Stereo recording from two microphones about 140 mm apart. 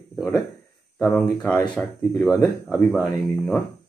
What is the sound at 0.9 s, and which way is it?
Speech, 15° left (ahead or behind).